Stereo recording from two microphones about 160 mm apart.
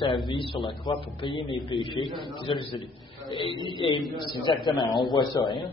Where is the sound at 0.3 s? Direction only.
30° left (ahead or behind).